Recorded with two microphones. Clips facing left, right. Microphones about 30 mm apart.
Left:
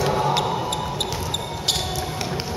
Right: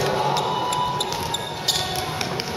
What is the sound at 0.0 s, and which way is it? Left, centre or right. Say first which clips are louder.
Music: left 1 dB; centre.